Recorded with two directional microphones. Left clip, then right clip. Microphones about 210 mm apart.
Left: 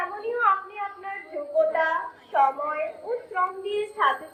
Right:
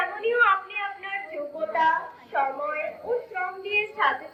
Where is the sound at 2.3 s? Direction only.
35° left (ahead or behind).